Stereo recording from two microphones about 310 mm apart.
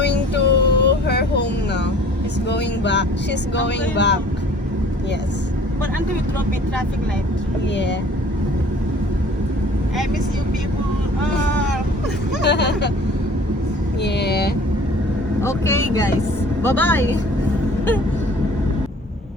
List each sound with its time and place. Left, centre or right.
0.0 s music: left
2.5 s speech: left
12.4 s speech: left
14.0 s speech: left
15.4 s speech: centre